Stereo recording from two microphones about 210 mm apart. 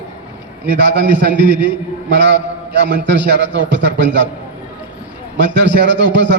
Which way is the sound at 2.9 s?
55° right (ahead or behind).